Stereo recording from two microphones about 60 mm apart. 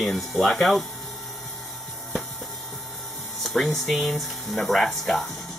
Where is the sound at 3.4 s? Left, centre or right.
Centre.